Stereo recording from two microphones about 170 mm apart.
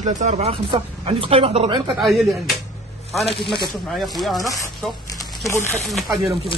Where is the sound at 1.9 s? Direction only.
Centre (ahead or behind).